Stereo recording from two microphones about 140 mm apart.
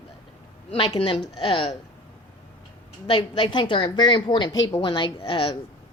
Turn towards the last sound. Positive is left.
turn(degrees=40)  # may be behind; listen again after turning